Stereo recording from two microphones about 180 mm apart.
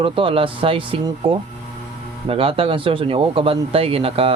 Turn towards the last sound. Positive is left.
turn(degrees=-30)  # may be behind; listen again after turning